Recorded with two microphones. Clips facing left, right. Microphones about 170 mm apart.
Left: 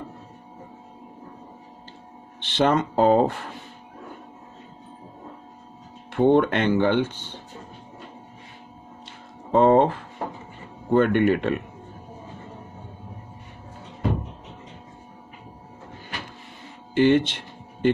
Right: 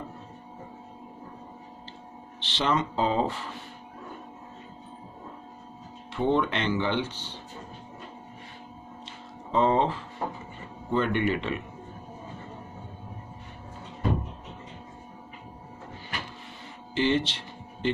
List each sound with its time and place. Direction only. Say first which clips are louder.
2.4 s speech: left 6 dB; 50° left (ahead or behind)
6.1 s speech: left 7 dB; 55° left (ahead or behind)
9.5 s speech: left 7 dB; 50° left (ahead or behind)
16.9 s speech: left 7 dB; 55° left (ahead or behind)